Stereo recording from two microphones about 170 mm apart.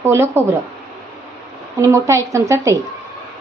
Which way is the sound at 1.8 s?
15° right (ahead or behind).